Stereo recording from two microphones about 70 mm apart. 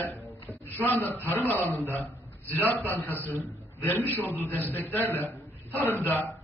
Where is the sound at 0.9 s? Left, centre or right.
Left.